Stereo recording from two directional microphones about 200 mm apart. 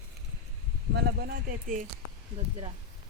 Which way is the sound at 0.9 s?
50° right (ahead or behind).